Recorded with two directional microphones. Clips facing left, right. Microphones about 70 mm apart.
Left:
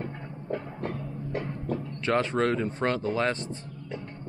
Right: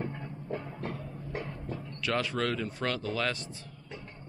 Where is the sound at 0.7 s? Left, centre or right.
Left.